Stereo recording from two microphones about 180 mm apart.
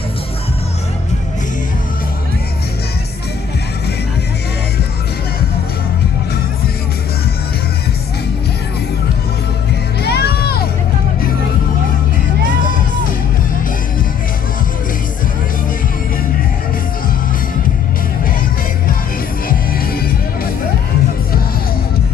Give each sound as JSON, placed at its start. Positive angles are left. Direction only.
{"t": 10.0, "sound": "music", "side_deg": 65}